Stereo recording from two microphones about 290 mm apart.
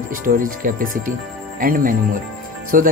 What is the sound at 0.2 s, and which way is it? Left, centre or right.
Speech, right.